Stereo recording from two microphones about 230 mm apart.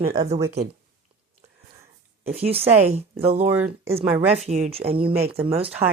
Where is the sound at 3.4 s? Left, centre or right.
Centre.